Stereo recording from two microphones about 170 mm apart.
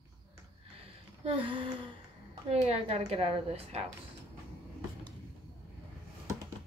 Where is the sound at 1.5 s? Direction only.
30° right (ahead or behind).